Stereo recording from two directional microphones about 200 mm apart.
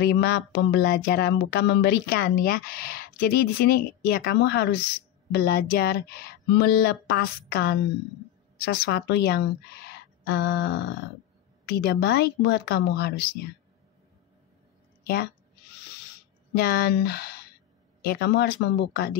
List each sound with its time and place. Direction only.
0.0 s a woman's voice: 55° left (ahead or behind)
16.5 s speech: 50° left (ahead or behind)